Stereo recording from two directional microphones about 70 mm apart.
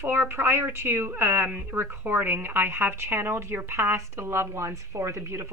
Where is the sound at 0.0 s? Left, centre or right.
Right.